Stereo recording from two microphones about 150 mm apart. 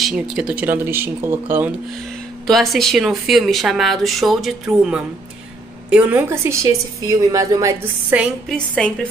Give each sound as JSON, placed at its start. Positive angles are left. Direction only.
{"t": 0.0, "sound": "a woman's voice", "side_deg": -5}
{"t": 2.4, "sound": "a woman's voice", "side_deg": 0}
{"t": 8.5, "sound": "speech", "side_deg": 5}